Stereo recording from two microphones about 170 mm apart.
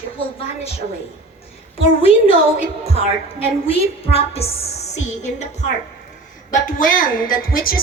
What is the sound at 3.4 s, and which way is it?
A woman's voice, 35° left (ahead or behind).